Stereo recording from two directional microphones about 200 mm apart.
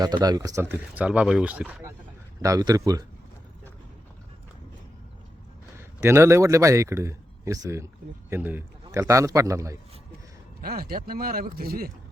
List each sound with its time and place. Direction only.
0.0 s speech: 20° right (ahead or behind)
5.7 s a man's voice: 15° right (ahead or behind)
10.6 s speech: 50° right (ahead or behind)